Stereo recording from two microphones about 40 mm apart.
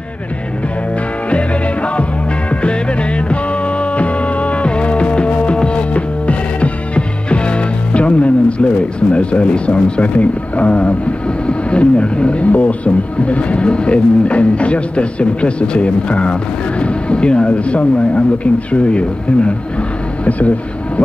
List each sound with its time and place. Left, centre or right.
2.6 s music: left
9.1 s speech: left